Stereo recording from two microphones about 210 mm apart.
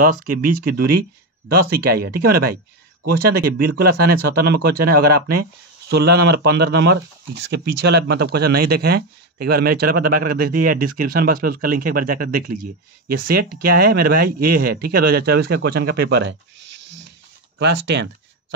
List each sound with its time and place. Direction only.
0.0 s speech: 45° right (ahead or behind)
17.6 s speech: 55° right (ahead or behind)